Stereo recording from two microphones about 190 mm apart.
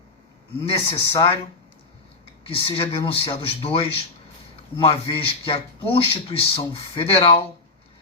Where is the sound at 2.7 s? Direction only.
30° left (ahead or behind).